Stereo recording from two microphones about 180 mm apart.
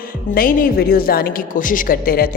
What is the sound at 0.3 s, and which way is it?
A woman's voice, 55° left (ahead or behind).